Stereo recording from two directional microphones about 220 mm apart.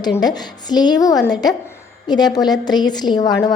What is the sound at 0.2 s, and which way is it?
A woman's voice, 20° left (ahead or behind).